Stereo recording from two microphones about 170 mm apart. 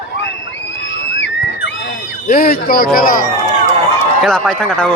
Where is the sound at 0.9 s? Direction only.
90° left.